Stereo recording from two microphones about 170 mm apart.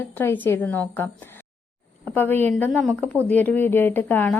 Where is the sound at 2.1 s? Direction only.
10° left (ahead or behind).